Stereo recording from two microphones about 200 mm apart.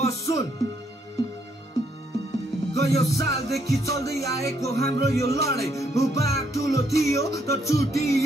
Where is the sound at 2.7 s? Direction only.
55° right (ahead or behind).